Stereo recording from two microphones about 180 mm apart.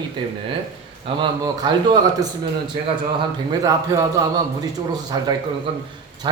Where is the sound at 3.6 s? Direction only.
20° right (ahead or behind).